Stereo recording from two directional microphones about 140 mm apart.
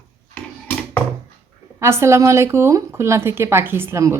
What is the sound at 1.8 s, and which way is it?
A woman's voice, 20° right (ahead or behind).